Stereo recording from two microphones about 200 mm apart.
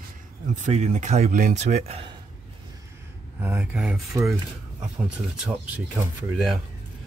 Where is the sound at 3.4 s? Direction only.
10° right (ahead or behind).